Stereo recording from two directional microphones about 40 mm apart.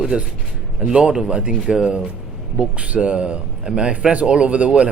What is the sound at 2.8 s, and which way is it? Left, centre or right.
Speech, right.